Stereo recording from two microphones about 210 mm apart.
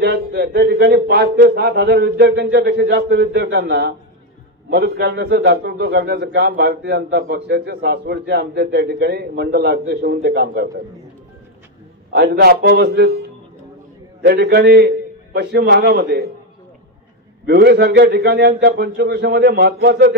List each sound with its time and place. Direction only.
0.0 s a man's voice: 50° right (ahead or behind)
12.2 s a man's voice: 50° right (ahead or behind)
17.5 s a man's voice: 50° right (ahead or behind)